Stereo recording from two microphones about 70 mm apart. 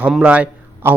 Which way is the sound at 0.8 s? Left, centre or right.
Right.